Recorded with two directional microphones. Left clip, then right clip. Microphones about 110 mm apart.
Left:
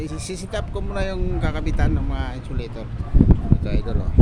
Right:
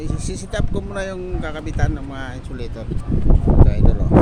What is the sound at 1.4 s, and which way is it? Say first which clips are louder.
Speech: even; 20° left (ahead or behind).